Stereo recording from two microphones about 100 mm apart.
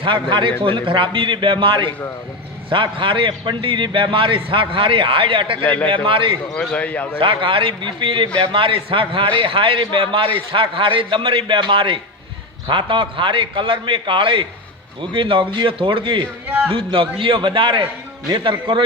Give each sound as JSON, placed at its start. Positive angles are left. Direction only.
{"t": 0.0, "sound": "a man's voice", "side_deg": -55}
{"t": 5.6, "sound": "a man's voice", "side_deg": 15}
{"t": 6.1, "sound": "a man's voice", "side_deg": -60}
{"t": 6.5, "sound": "a man's voice", "side_deg": 15}
{"t": 7.2, "sound": "a man's voice", "side_deg": -60}